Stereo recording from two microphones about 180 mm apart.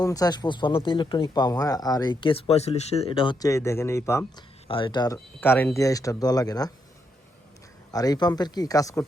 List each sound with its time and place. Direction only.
0.0 s speech: 20° left (ahead or behind)
4.7 s speech: 25° left (ahead or behind)
7.9 s speech: 20° left (ahead or behind)